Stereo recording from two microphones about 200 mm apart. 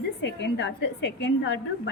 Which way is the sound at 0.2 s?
60° left (ahead or behind).